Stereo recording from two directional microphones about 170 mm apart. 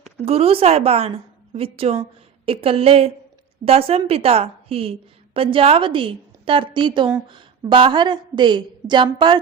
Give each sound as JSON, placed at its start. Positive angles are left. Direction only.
{"t": 0.3, "sound": "a woman's voice", "side_deg": -35}